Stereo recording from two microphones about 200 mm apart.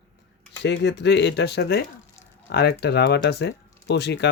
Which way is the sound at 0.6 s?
60° left (ahead or behind).